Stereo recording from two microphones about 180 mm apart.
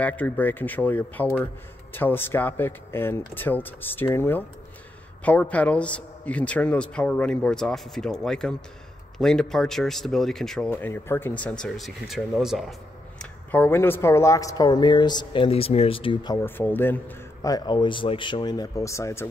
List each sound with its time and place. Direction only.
0.0 s a man's voice: 10° left (ahead or behind)
13.2 s speech: 10° left (ahead or behind); by 16.3 s 25° left (ahead or behind)
16.3 s speech: 10° left (ahead or behind)